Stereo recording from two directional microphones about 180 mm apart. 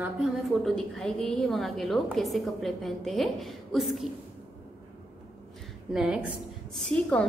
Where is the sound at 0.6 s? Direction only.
5° left (ahead or behind).